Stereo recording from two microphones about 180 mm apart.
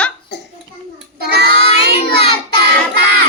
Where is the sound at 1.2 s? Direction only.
65° right (ahead or behind).